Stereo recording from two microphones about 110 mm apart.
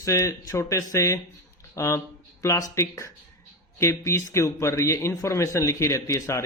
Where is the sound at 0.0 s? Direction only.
30° left (ahead or behind).